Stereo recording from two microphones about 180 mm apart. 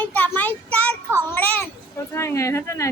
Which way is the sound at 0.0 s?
10° left (ahead or behind).